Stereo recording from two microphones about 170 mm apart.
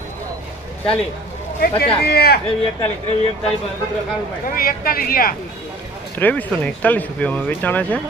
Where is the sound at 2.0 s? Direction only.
70° left (ahead or behind).